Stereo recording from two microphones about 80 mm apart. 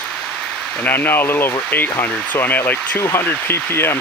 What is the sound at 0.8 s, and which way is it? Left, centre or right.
Speech, left.